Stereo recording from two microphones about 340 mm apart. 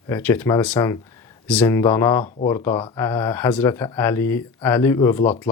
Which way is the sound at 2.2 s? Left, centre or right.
Left.